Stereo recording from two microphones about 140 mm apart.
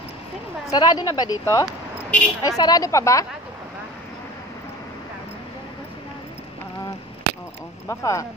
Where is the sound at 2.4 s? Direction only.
30° left (ahead or behind).